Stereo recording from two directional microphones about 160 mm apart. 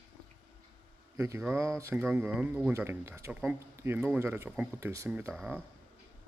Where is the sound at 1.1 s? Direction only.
15° right (ahead or behind).